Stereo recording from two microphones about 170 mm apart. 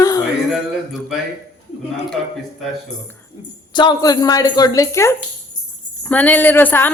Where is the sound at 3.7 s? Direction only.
25° left (ahead or behind).